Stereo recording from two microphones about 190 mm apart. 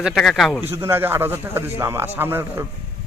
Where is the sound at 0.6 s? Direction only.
15° right (ahead or behind).